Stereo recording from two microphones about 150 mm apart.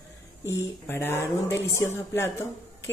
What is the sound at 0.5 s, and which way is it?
Speech, 15° left (ahead or behind).